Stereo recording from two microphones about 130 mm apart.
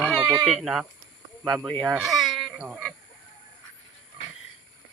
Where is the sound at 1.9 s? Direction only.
Centre (ahead or behind).